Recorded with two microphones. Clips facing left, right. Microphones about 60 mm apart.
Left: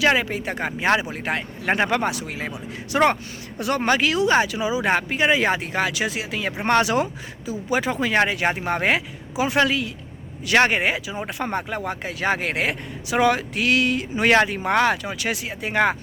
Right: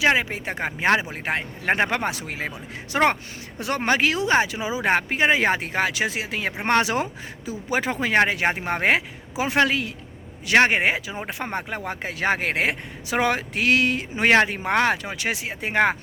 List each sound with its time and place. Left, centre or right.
0.0 s a man's voice: right
10.4 s a man's voice: right